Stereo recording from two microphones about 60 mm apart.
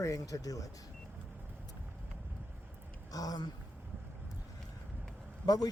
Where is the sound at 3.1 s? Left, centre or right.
Left.